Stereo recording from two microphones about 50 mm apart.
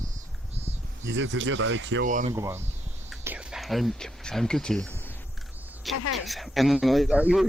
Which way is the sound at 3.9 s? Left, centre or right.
Centre.